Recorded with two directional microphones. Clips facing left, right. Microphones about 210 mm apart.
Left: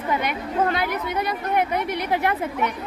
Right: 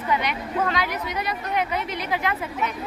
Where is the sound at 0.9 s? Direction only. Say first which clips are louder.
Left 3 dB; 55° left (ahead or behind).